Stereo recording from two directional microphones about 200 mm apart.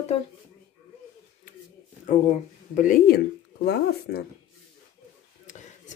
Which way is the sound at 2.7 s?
45° left (ahead or behind).